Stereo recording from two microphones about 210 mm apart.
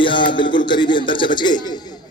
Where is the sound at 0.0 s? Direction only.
25° left (ahead or behind).